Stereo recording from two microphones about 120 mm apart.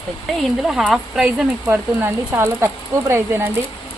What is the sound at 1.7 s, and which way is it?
Speech, 20° right (ahead or behind).